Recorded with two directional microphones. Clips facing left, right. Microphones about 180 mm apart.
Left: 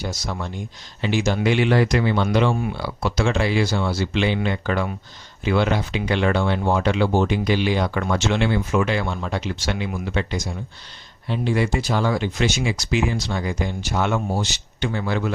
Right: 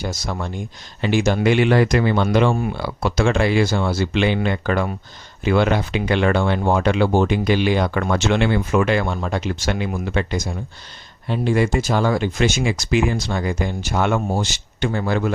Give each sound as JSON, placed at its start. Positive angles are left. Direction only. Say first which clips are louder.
{"t": 0.0, "sound": "speech", "louder": "right 2 dB", "side_deg": -50}